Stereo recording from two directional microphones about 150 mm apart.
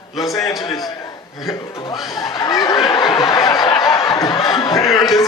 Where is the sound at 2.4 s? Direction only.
25° left (ahead or behind).